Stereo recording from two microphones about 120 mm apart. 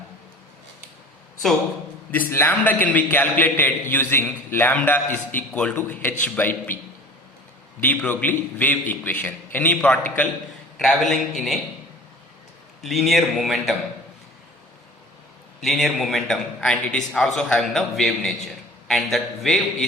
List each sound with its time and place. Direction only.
2.1 s a man's voice: 20° left (ahead or behind)
7.8 s a man's voice: 15° left (ahead or behind)
12.8 s a man's voice: centre (ahead or behind)
15.6 s a man's voice: centre (ahead or behind)